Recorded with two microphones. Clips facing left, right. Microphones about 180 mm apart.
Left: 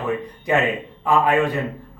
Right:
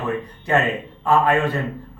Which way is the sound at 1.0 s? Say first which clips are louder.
Even; 15° left (ahead or behind).